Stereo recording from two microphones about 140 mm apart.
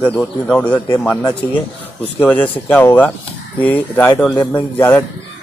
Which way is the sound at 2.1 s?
10° left (ahead or behind).